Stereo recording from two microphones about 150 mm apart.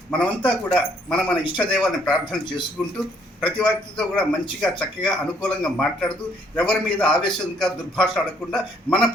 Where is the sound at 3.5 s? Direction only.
5° left (ahead or behind).